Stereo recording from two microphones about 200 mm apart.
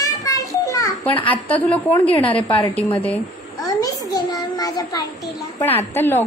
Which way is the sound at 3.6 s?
15° left (ahead or behind).